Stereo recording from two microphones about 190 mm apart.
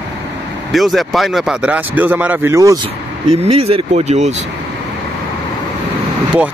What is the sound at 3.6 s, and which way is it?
Speech, 35° right (ahead or behind).